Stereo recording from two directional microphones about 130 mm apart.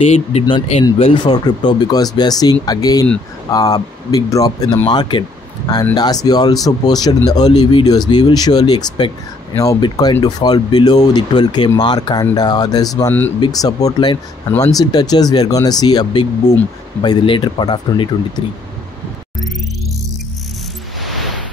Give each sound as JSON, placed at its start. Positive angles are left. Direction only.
{"t": 0.1, "sound": "speech", "side_deg": 50}
{"t": 1.3, "sound": "speech", "side_deg": 35}